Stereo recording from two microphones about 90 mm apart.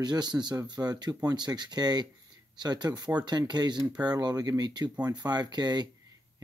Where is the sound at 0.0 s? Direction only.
50° right (ahead or behind).